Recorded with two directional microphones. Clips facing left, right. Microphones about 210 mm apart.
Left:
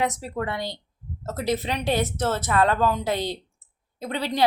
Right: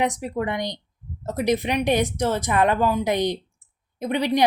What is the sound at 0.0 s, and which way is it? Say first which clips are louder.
Speech: right 3 dB; 15° right (ahead or behind).